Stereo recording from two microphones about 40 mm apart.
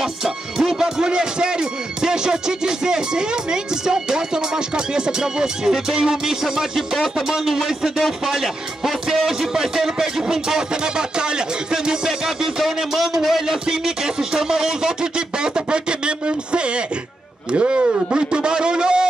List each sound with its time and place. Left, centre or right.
0.0 s speech: centre
7.4 s music: centre; by 16.8 s right
17.5 s a man's voice: right